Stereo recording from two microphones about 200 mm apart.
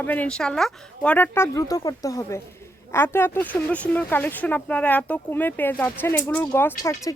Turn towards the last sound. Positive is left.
turn(degrees=15)  # may be behind; listen again after turning